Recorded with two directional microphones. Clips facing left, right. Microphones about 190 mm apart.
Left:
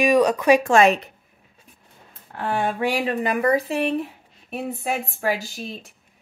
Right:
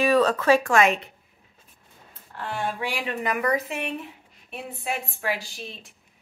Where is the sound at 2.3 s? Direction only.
55° left (ahead or behind).